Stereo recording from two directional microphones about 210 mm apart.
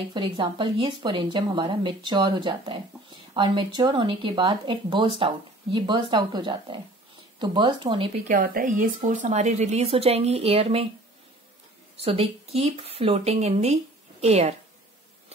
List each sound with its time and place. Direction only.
0.1 s speech: 25° right (ahead or behind)
8.3 s a woman's voice: 40° right (ahead or behind)
12.0 s a woman's voice: 25° right (ahead or behind)